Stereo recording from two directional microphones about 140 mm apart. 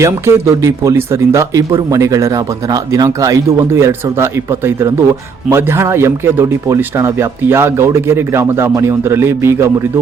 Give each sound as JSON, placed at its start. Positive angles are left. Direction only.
{"t": 0.0, "sound": "speech", "side_deg": -20}